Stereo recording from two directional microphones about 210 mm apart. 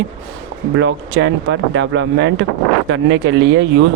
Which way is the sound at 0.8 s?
60° right (ahead or behind).